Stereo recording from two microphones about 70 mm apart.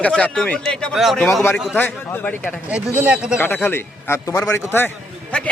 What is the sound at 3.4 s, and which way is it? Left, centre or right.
Speech, left.